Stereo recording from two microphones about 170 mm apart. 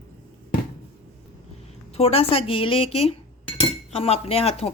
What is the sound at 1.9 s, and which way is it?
A woman's voice, 35° left (ahead or behind).